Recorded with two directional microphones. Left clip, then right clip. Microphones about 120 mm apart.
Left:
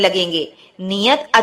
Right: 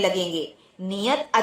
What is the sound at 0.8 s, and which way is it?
Speech, 35° left (ahead or behind).